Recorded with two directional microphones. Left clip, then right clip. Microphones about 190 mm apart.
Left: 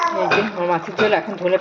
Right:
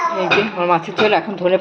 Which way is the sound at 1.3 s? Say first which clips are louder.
Right 2 dB; 20° right (ahead or behind).